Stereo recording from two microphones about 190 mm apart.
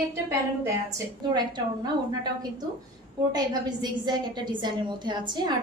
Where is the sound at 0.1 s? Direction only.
15° right (ahead or behind).